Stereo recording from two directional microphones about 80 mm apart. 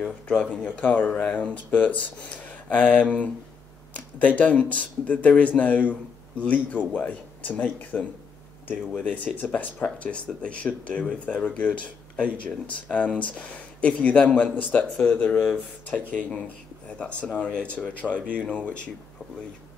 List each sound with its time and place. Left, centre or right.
0.0 s speech: centre
4.4 s speech: centre
12.8 s speech: centre
16.8 s speech: centre
18.2 s speech: centre
18.5 s speech: centre